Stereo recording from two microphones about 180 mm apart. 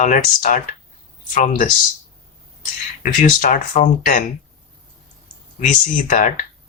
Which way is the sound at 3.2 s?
50° left (ahead or behind).